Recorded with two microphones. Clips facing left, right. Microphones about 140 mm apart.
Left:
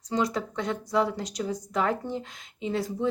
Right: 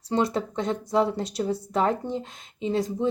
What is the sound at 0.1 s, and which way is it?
Speech, 30° right (ahead or behind).